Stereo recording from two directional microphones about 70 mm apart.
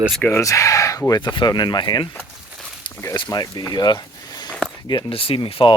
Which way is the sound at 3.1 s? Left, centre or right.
Left.